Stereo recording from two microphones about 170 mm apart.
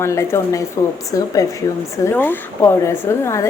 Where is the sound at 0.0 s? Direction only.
15° left (ahead or behind).